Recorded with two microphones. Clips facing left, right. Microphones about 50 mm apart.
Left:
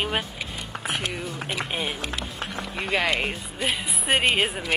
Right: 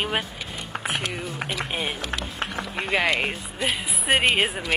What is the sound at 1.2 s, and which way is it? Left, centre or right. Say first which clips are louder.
Speech: right 1 dB; centre.